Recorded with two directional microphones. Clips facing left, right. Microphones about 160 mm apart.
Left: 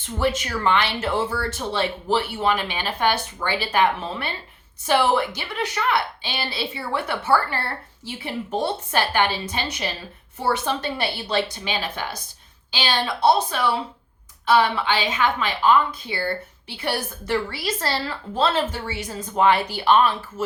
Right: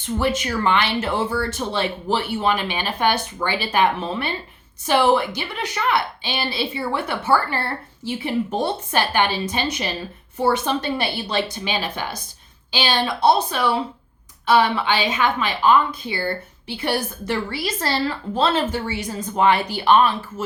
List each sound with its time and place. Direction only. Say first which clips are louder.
0.0 s a woman's voice: right 2 dB; 15° right (ahead or behind)